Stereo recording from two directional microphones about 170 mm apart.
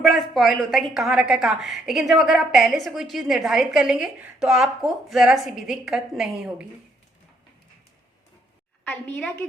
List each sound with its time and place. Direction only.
0.0 s a woman's voice: centre (ahead or behind)
8.8 s a woman's voice: 10° left (ahead or behind)